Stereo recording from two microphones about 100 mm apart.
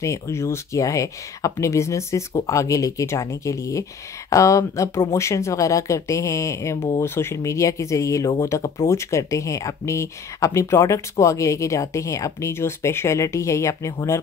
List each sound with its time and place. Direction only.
0.0 s speech: 30° left (ahead or behind)